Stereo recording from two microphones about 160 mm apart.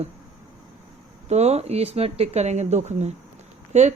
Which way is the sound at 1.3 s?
45° right (ahead or behind).